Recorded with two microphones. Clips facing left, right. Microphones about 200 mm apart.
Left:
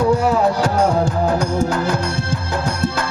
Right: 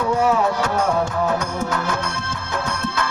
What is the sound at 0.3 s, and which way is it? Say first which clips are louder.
Music: left 3 dB; 35° left (ahead or behind).